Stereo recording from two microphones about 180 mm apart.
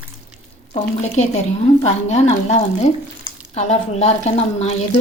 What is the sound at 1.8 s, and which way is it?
A woman's voice, 35° left (ahead or behind).